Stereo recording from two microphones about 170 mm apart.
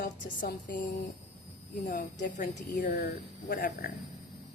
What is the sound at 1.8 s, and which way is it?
Speech, 50° left (ahead or behind).